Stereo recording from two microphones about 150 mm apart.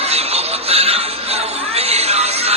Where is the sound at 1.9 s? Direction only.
45° right (ahead or behind).